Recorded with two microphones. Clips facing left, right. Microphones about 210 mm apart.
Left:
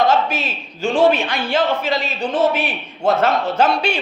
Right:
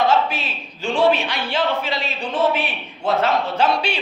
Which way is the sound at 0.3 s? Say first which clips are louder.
Left 4 dB; 45° left (ahead or behind).